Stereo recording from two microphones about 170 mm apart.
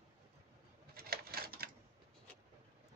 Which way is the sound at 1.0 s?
65° right (ahead or behind).